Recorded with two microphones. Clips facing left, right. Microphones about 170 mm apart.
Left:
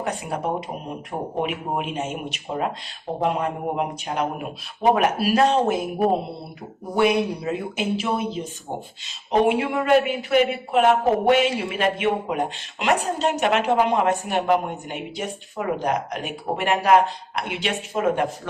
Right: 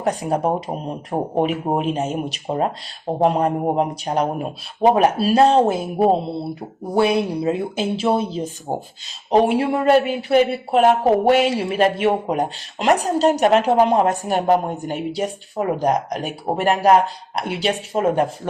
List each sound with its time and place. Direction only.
0.0 s speech: 35° right (ahead or behind)